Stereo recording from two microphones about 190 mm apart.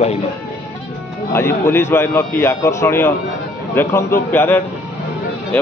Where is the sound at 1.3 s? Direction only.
15° left (ahead or behind).